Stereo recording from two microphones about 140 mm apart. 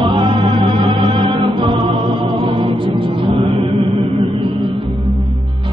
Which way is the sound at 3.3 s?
50° right (ahead or behind).